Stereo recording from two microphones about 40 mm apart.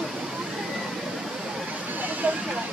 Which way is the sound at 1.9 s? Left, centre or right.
Right.